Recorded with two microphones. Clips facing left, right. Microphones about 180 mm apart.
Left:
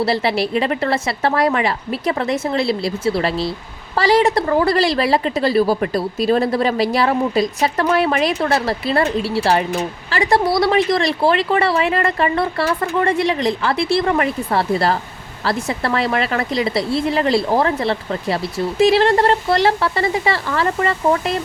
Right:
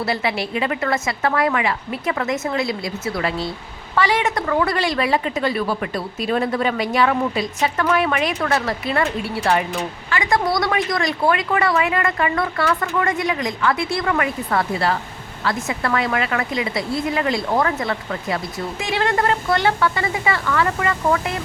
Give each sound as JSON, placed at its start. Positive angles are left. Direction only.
{"t": 0.0, "sound": "a woman's voice", "side_deg": 35}